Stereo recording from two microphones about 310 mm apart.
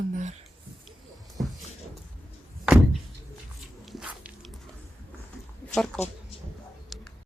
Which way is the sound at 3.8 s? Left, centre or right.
Centre.